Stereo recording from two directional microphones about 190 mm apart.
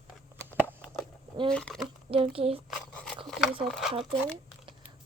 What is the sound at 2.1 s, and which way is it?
Speech, 30° right (ahead or behind).